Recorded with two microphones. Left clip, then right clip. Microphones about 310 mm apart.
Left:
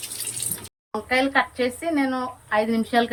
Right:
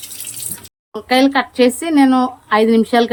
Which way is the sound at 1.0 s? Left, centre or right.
Centre.